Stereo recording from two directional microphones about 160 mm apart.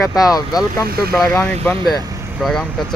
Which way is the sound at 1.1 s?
5° left (ahead or behind).